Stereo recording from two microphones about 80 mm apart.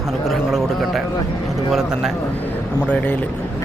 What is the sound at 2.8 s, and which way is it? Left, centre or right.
Speech, centre.